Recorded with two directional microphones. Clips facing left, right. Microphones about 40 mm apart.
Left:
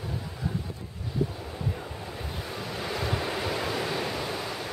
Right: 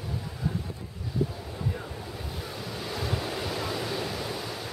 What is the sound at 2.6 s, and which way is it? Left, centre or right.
Waves, centre.